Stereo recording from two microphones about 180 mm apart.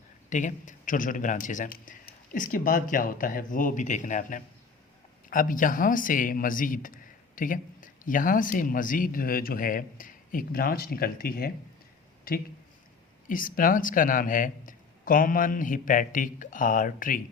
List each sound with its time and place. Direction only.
0.3 s a man's voice: 45° left (ahead or behind)
13.2 s a man's voice: 50° left (ahead or behind)